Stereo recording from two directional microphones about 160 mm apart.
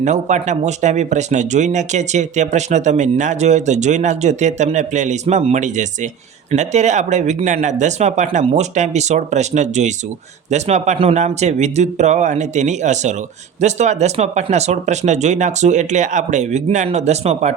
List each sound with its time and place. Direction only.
0.0 s speech: 45° right (ahead or behind)